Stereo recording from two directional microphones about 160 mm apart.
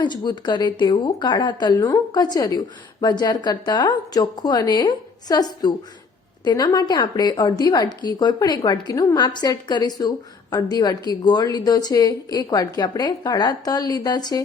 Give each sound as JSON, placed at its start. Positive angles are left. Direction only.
{"t": 0.0, "sound": "speech", "side_deg": 25}